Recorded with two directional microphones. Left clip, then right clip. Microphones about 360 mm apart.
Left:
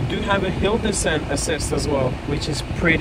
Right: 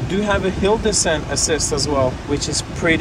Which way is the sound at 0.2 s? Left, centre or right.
Centre.